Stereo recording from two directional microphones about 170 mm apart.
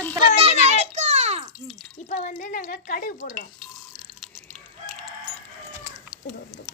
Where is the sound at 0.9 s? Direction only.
40° right (ahead or behind).